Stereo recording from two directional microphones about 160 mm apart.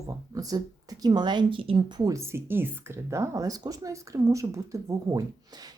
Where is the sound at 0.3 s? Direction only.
20° right (ahead or behind).